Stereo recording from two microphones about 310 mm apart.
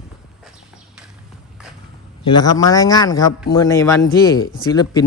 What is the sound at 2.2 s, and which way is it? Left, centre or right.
A man's voice, centre.